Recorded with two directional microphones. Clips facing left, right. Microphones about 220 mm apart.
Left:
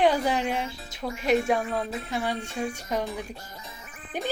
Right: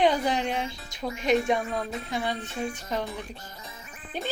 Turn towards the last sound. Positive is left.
turn(degrees=15)  # may be behind; listen again after turning